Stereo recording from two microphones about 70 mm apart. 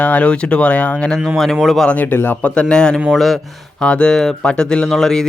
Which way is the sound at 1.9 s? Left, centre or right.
Left.